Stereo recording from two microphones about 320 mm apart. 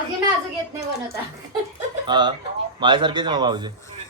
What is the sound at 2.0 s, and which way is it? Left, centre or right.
A man's voice, centre.